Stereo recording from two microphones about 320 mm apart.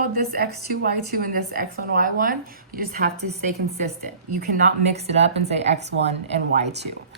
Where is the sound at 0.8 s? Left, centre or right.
Right.